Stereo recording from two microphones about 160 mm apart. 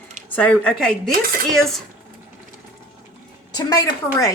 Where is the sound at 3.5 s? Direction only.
25° left (ahead or behind).